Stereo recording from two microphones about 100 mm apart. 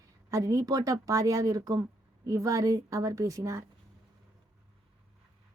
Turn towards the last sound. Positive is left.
turn(degrees=-30)  # may be behind; listen again after turning